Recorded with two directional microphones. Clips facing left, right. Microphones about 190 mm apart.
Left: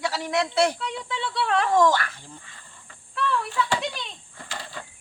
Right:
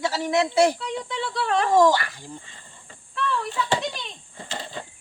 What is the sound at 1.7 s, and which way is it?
A child's voice, 15° right (ahead or behind).